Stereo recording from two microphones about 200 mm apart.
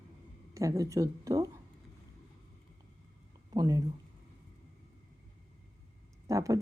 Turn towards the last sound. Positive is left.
turn(degrees=-15)  # may be behind; listen again after turning